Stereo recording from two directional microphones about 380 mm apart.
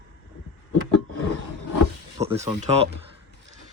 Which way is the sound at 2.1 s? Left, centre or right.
Centre.